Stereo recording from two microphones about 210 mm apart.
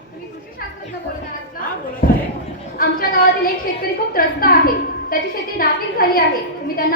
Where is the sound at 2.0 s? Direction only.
40° left (ahead or behind).